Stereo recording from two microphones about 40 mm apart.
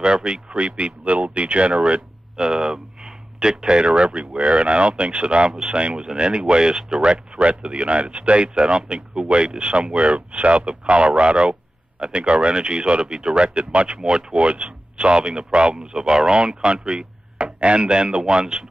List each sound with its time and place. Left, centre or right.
0.0 s speech: right